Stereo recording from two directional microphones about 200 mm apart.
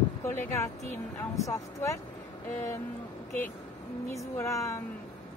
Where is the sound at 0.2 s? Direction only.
10° left (ahead or behind).